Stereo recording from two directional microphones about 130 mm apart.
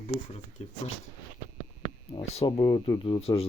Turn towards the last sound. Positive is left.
turn(degrees=45)  # may be behind; listen again after turning